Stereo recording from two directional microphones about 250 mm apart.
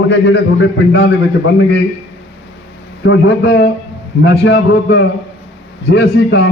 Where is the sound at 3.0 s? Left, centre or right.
Left.